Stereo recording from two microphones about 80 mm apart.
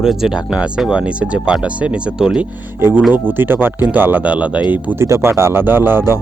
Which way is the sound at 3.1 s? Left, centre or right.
Right.